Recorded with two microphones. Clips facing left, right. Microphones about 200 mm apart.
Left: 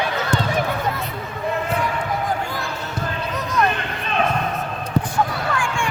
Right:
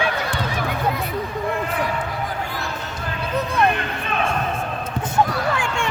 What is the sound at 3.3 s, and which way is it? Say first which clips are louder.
Music: right 2 dB; 30° right (ahead or behind).